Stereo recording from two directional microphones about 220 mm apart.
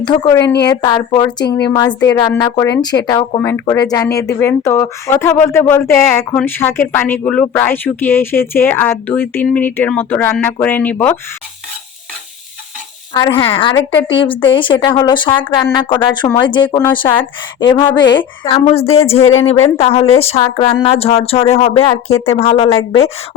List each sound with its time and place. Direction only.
0.0 s speech: 20° left (ahead or behind)
13.1 s speech: 20° left (ahead or behind)